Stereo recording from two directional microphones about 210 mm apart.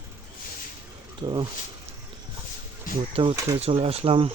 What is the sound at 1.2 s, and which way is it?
Speech, 25° right (ahead or behind).